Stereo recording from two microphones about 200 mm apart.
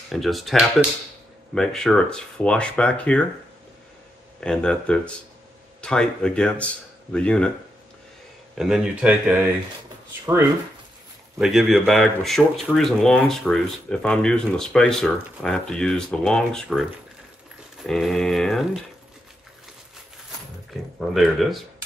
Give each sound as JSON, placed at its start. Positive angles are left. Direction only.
{"t": 0.1, "sound": "speech", "side_deg": 0}
{"t": 4.4, "sound": "speech", "side_deg": 5}
{"t": 8.5, "sound": "speech", "side_deg": 0}
{"t": 11.3, "sound": "speech", "side_deg": -5}
{"t": 17.8, "sound": "speech", "side_deg": 0}
{"t": 21.0, "sound": "speech", "side_deg": 0}